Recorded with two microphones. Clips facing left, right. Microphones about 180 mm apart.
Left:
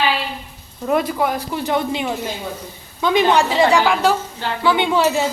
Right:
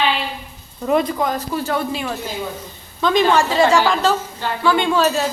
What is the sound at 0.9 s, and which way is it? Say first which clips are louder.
A woman's voice: even; 5° left (ahead or behind).